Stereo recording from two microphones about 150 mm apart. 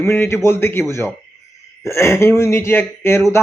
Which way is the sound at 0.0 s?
15° left (ahead or behind).